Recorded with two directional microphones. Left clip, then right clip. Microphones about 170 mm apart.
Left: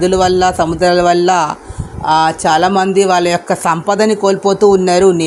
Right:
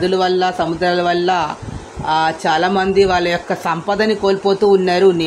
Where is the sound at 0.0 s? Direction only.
45° left (ahead or behind).